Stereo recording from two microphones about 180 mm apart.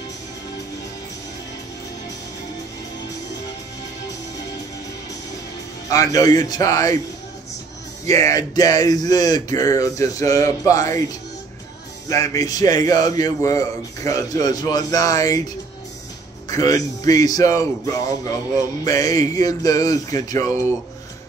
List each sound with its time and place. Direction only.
5.9 s a man's voice: 20° left (ahead or behind)
8.1 s a man's voice: 20° left (ahead or behind)
12.1 s a man's voice: 15° left (ahead or behind)
18.9 s a man's voice: 20° left (ahead or behind)